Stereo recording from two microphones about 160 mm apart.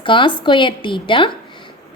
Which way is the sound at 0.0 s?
30° left (ahead or behind).